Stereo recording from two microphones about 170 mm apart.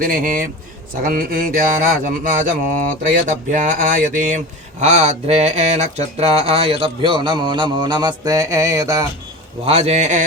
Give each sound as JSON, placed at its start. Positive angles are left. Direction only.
{"t": 0.0, "sound": "speech", "side_deg": -55}
{"t": 9.6, "sound": "speech", "side_deg": -40}